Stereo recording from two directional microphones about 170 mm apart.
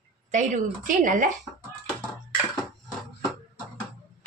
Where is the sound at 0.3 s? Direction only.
50° right (ahead or behind).